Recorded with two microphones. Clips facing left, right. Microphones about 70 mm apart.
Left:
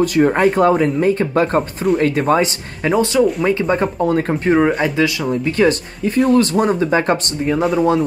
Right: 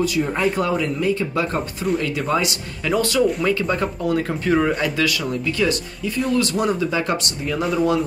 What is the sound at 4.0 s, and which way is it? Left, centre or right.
Speech, left.